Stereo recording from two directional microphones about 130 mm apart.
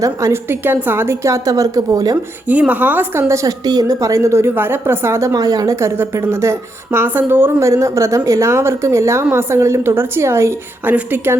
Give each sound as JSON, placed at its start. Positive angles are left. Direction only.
{"t": 0.0, "sound": "a woman's voice", "side_deg": -25}
{"t": 2.5, "sound": "a woman's voice", "side_deg": -10}